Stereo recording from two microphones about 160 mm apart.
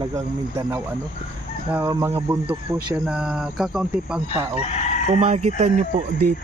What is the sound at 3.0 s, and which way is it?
Speech, 5° right (ahead or behind).